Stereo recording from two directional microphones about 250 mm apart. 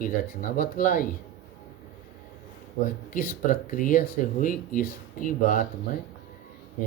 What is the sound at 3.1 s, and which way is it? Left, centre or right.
Speech, left.